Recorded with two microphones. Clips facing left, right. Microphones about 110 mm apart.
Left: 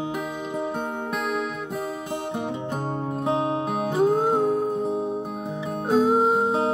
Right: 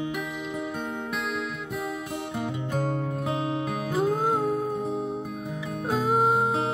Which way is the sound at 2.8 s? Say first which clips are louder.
Left 1 dB; 25° left (ahead or behind).